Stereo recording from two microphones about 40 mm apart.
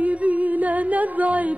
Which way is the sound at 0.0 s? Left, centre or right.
Right.